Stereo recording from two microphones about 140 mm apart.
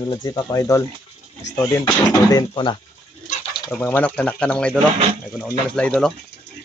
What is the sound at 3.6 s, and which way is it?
Speech, 10° left (ahead or behind).